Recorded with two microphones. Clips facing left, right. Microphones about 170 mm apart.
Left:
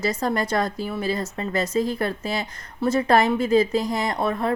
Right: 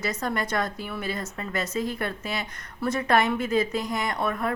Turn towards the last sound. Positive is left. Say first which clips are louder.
# left 4 dB
turn(degrees=30)  # may be behind; listen again after turning